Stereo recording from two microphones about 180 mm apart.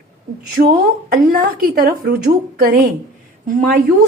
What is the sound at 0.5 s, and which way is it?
A woman's voice, 50° right (ahead or behind).